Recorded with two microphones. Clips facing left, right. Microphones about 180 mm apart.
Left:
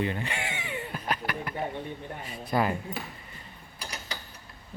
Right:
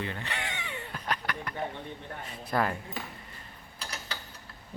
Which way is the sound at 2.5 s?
5° left (ahead or behind).